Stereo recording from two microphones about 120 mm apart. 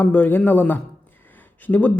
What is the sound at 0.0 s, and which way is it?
Speech, 15° left (ahead or behind).